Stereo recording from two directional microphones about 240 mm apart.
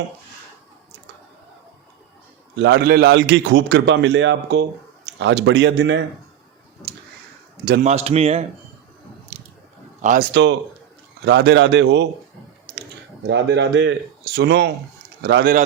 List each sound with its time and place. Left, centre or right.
2.6 s a man's voice: right
7.7 s a man's voice: right
10.0 s a man's voice: right
10.3 s a man's voice: right
13.2 s a man's voice: right